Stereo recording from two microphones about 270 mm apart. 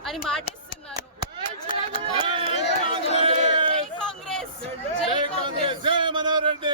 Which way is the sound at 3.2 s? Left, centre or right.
Right.